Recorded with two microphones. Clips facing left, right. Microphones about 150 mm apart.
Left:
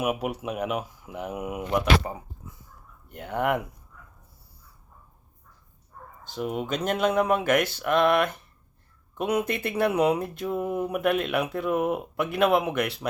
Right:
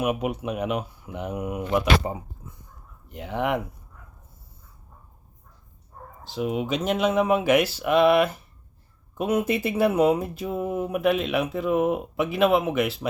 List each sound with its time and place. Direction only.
0.0 s speech: 5° left (ahead or behind)
2.0 s speech: 25° right (ahead or behind)
3.1 s speech: centre (ahead or behind)
6.3 s speech: 5° right (ahead or behind)